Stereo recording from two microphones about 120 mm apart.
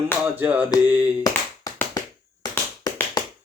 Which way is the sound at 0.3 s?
15° right (ahead or behind).